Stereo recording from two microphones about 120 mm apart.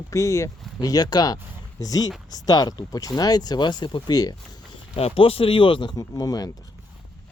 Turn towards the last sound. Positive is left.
turn(degrees=30)  # may be behind; listen again after turning